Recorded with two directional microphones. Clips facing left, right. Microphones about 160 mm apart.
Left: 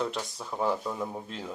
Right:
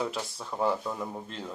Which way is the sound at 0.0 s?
5° right (ahead or behind).